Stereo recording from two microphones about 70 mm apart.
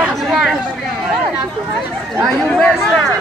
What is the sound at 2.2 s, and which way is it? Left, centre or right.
Speech, centre.